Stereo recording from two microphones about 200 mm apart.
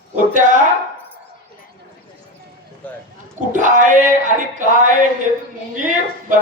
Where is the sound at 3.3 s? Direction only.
40° right (ahead or behind).